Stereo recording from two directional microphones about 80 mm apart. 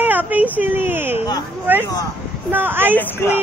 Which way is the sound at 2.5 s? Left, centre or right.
Right.